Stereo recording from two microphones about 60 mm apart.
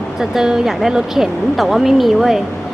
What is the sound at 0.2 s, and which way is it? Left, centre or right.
Speech, centre.